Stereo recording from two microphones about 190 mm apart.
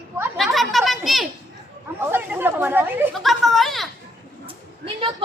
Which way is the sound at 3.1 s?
Centre (ahead or behind).